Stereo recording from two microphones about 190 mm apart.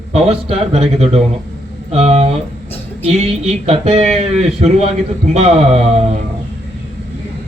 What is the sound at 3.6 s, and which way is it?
A man's voice, 35° right (ahead or behind).